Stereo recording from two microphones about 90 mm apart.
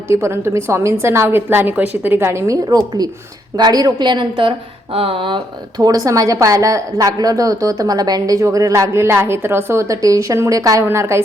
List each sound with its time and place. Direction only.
0.1 s a woman's voice: 30° right (ahead or behind)
2.6 s a woman's voice: 45° right (ahead or behind); by 4.5 s 65° right (ahead or behind)
4.9 s speech: 80° right
5.7 s a woman's voice: 45° right (ahead or behind)